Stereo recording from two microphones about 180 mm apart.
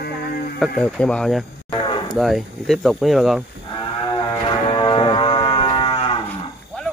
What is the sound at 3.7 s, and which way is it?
Livestock, 25° left (ahead or behind).